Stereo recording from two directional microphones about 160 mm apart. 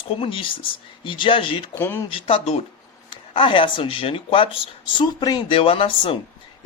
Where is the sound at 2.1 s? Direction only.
35° left (ahead or behind).